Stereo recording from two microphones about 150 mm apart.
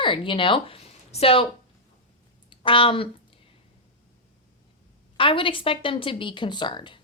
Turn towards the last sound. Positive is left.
turn(degrees=30)  # may be behind; listen again after turning